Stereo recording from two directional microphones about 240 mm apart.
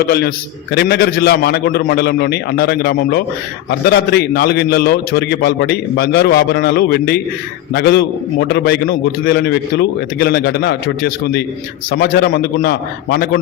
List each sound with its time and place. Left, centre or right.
0.1 s a man's voice: left